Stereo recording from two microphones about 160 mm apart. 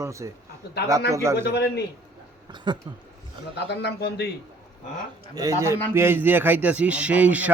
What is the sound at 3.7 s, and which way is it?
Speech, 90° left.